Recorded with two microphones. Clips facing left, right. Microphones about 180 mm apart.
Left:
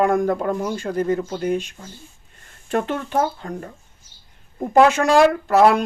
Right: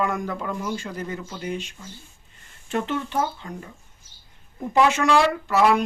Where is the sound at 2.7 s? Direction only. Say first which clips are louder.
Left 3 dB; 50° left (ahead or behind).